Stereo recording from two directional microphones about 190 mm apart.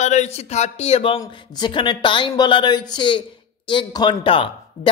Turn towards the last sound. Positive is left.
turn(degrees=30)  # may be behind; listen again after turning